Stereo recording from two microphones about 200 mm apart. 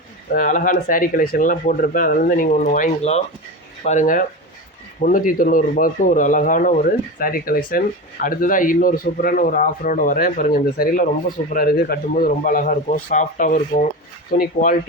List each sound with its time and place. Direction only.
0.3 s speech: 40° left (ahead or behind)